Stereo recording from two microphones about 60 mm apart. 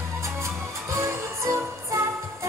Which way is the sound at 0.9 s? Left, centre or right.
Right.